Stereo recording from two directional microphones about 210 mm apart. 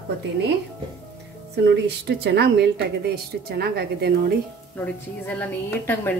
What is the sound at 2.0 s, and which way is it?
Speech, 50° right (ahead or behind).